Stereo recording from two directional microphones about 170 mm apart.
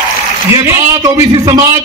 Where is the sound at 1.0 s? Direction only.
20° right (ahead or behind).